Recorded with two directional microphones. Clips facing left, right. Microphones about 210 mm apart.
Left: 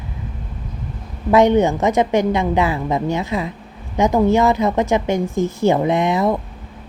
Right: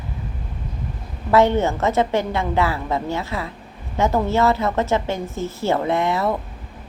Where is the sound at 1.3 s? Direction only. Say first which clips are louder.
Left 3 dB; 15° left (ahead or behind).